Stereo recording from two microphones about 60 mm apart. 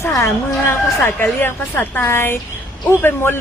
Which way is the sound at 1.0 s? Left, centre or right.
Left.